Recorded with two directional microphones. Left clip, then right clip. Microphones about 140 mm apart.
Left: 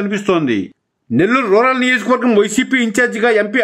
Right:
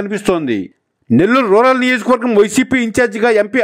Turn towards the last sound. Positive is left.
turn(degrees=-45)  # may be behind; listen again after turning